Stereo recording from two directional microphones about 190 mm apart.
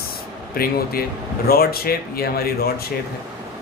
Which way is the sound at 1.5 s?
55° left (ahead or behind).